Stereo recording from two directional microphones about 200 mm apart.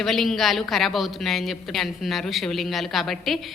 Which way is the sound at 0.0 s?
Centre (ahead or behind).